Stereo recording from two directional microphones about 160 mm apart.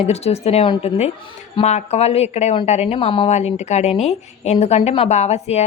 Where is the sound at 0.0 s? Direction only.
40° left (ahead or behind).